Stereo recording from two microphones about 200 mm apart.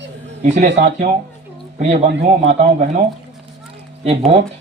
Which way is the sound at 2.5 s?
35° right (ahead or behind).